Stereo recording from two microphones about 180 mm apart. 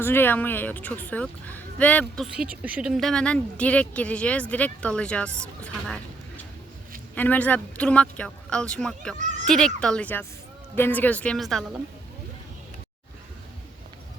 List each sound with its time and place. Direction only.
0.0 s speech: 10° left (ahead or behind)
9.1 s speech: 40° right (ahead or behind)
9.5 s speech: 5° left (ahead or behind)